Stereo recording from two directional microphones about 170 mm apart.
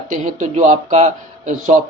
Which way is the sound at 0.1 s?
45° right (ahead or behind).